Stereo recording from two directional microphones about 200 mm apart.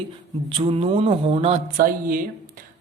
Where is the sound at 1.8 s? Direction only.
45° right (ahead or behind).